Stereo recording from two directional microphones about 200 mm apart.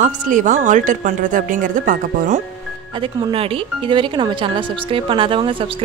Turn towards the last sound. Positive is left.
turn(degrees=-25)  # may be behind; listen again after turning